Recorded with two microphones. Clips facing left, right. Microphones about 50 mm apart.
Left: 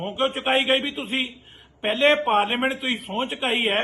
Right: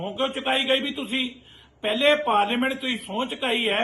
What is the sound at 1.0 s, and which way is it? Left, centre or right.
Speech, left.